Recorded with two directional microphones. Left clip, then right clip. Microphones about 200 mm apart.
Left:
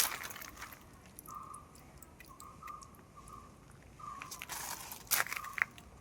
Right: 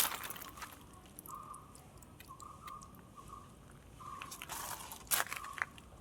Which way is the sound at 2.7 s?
30° right (ahead or behind).